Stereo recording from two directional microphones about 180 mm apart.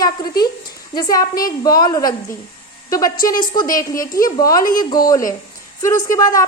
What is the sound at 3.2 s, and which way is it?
A woman's voice, 20° left (ahead or behind).